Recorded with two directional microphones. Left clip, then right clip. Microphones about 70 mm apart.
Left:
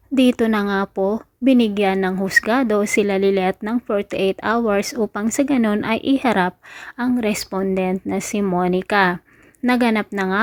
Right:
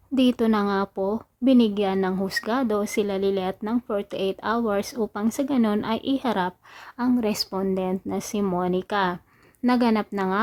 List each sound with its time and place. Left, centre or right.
0.1 s a woman's voice: left
7.0 s a woman's voice: left
9.6 s a woman's voice: left